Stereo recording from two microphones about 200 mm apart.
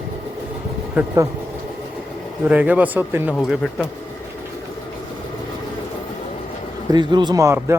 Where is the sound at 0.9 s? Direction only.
15° right (ahead or behind).